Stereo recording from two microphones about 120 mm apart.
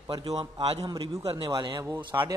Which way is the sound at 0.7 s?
35° right (ahead or behind).